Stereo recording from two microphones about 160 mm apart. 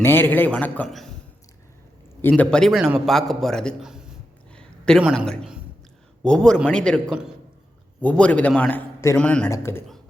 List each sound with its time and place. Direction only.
0.0 s a man's voice: 15° left (ahead or behind)
2.4 s a man's voice: 5° left (ahead or behind)
5.1 s a man's voice: 5° left (ahead or behind)